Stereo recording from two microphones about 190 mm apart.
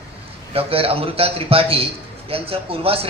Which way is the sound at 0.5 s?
30° right (ahead or behind).